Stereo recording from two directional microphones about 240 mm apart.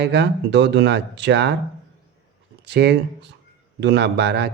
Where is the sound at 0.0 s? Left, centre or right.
Right.